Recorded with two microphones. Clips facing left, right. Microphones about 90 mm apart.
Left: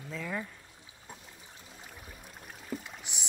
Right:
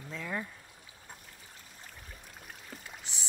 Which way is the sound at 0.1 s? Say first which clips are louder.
Left 1 dB; centre (ahead or behind).